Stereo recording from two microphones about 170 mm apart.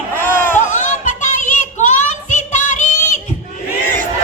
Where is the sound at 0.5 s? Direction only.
45° left (ahead or behind).